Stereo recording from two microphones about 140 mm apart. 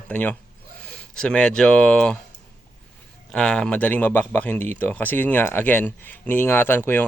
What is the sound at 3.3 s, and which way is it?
Speech, 5° left (ahead or behind).